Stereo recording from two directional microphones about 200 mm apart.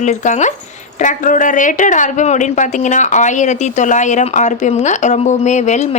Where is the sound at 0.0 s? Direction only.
35° left (ahead or behind).